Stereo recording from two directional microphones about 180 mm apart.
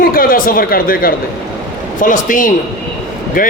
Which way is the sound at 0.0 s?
55° left (ahead or behind).